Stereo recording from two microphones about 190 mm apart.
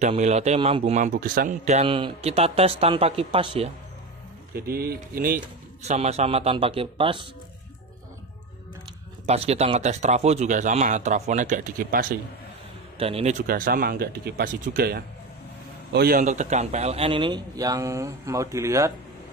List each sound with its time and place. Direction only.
0.0 s speech: 35° right (ahead or behind)
4.6 s speech: 50° right (ahead or behind)
5.8 s speech: 35° right (ahead or behind)
9.2 s speech: 35° right (ahead or behind); by 12.2 s 50° right (ahead or behind)
13.0 s speech: 35° right (ahead or behind)
13.5 s a man's voice: 50° right (ahead or behind); by 18.9 s 15° right (ahead or behind)